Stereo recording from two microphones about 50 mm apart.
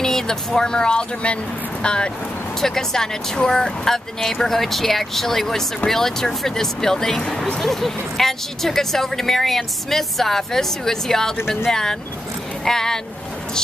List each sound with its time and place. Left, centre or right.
0.0 s speech: centre
7.6 s speech: centre